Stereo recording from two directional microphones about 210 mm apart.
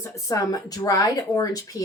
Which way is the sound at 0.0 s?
15° left (ahead or behind).